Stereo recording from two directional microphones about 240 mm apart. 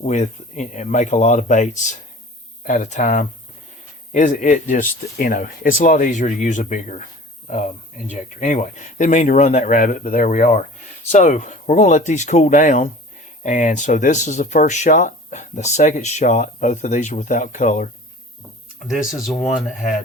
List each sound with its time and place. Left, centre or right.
0.0 s speech: left
18.9 s speech: centre